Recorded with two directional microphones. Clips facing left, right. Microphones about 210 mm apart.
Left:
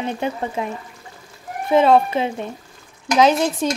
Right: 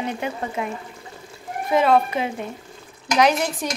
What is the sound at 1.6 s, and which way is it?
A woman's voice, 25° left (ahead or behind).